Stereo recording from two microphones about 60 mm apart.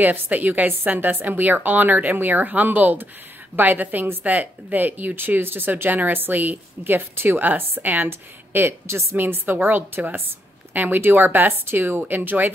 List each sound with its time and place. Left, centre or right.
0.0 s speech: right
8.1 s speech: right